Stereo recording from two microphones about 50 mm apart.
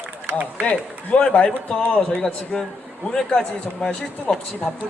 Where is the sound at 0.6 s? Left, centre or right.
Left.